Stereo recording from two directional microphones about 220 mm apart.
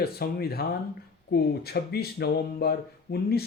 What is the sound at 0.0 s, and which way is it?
Speech, 45° left (ahead or behind).